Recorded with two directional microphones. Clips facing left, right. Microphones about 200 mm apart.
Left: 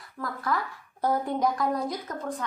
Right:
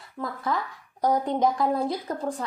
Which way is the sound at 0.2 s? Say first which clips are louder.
Right 1 dB; 25° right (ahead or behind).